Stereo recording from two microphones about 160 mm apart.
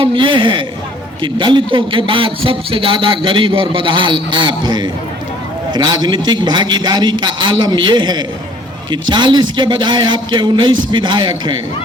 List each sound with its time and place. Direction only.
0.0 s a man's voice: 30° right (ahead or behind)